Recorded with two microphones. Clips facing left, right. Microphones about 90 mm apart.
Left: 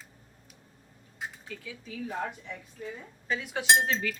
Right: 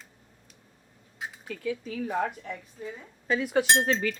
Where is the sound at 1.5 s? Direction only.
60° right (ahead or behind).